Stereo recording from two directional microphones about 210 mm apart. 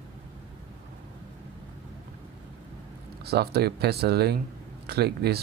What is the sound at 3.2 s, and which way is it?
Speech, 50° right (ahead or behind).